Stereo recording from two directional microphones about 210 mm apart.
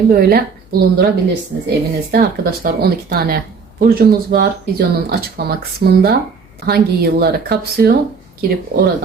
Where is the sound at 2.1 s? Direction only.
45° right (ahead or behind).